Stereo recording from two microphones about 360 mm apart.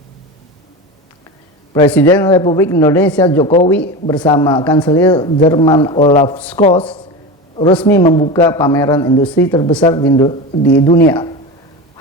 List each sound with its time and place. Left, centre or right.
1.7 s a man's voice: centre